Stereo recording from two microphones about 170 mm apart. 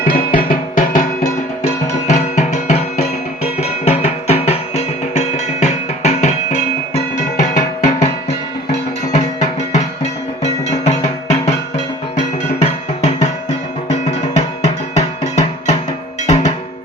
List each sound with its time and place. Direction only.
0.0 s music: 55° left (ahead or behind)